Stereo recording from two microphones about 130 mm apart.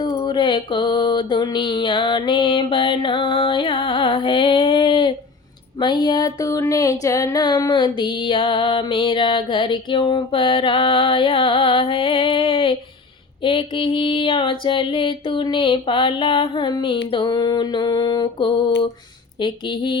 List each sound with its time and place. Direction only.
0.3 s music: 35° left (ahead or behind)